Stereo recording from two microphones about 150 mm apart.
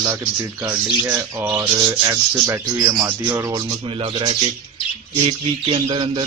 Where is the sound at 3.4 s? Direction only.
25° right (ahead or behind).